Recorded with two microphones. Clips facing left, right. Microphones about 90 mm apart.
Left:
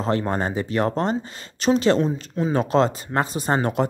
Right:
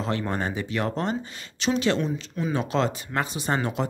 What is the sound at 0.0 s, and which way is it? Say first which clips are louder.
Speech: left 5 dB; 35° left (ahead or behind).